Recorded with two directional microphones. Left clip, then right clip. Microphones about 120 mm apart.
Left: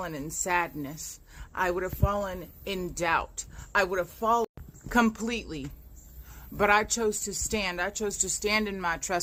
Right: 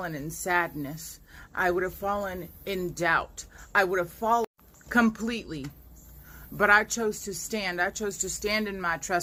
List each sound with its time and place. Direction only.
0.0 s a woman's voice: 30° left (ahead or behind)
4.9 s a woman's voice: 35° left (ahead or behind)